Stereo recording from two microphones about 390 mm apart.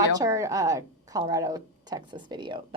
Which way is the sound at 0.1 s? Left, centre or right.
Centre.